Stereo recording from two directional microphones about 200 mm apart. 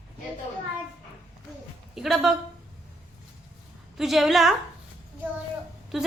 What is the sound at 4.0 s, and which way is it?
Speech, centre (ahead or behind).